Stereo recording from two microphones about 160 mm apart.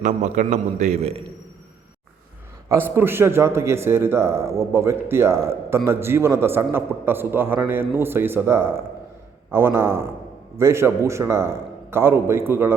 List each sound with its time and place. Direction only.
0.0 s a man's voice: 50° right (ahead or behind)
2.6 s a man's voice: 15° right (ahead or behind)